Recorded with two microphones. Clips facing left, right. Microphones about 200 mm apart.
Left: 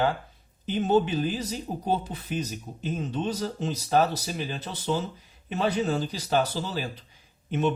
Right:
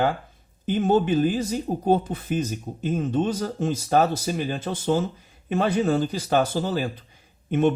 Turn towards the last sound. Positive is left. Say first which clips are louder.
# right 5 dB
turn(degrees=-50)  # may be behind; listen again after turning